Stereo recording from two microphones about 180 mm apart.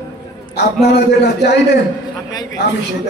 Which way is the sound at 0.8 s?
65° left (ahead or behind).